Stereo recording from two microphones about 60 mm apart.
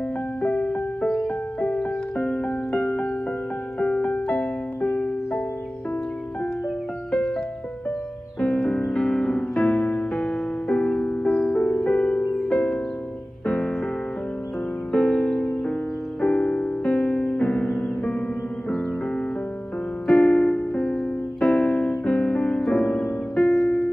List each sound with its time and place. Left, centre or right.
0.4 s music: left
1.0 s music: centre
1.6 s music: centre
7.1 s music: centre
8.4 s music: centre
12.2 s music: centre
14.9 s music: centre
20.2 s music: centre
23.6 s keyboard: centre